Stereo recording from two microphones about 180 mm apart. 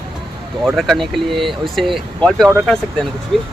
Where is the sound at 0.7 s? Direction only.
Centre (ahead or behind).